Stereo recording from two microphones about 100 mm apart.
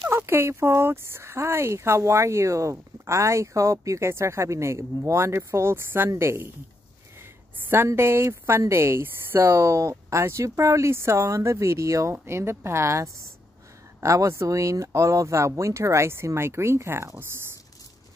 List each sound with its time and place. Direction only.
0.1 s speech: 25° right (ahead or behind)
7.7 s speech: 25° right (ahead or behind)